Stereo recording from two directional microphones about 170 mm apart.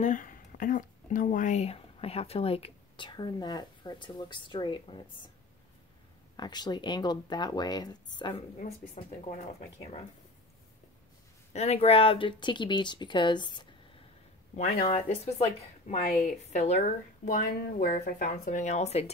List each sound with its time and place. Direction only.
0.0 s speech: 50° left (ahead or behind); by 5.3 s 30° left (ahead or behind)
6.3 s speech: 25° left (ahead or behind)
8.5 s speech: 40° left (ahead or behind)
11.5 s speech: 40° left (ahead or behind)
14.9 s speech: 40° left (ahead or behind)
17.2 s speech: 60° left (ahead or behind); by 19.0 s 40° left (ahead or behind)